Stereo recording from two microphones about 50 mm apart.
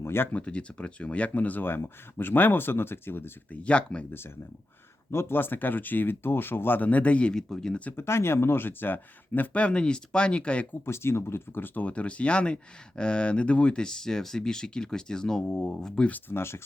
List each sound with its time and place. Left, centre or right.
0.0 s a sound: left
0.3 s speech: left
3.5 s speech: left
5.1 s speech: left
7.3 s speech: centre
7.9 s speech: left
10.8 s speech: left; by 16.0 s centre
16.3 s speech: left